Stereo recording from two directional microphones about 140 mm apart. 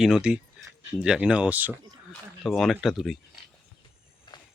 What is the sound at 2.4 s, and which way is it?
Speech, centre (ahead or behind).